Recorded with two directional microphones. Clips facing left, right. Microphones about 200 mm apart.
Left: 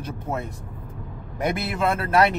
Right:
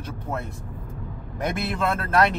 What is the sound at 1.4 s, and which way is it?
Speech, 15° left (ahead or behind).